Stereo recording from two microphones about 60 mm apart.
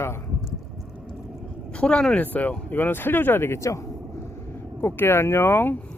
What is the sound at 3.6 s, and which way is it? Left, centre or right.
Speech, left.